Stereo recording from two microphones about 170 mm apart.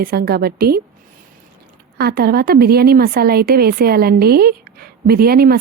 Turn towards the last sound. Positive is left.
turn(degrees=-60)  # may be behind; listen again after turning